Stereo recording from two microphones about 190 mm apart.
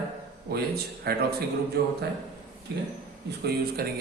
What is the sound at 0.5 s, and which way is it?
A man's voice, 55° right (ahead or behind).